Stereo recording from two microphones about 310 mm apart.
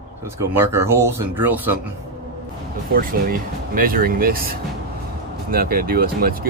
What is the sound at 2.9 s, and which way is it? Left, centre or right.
Speech, right.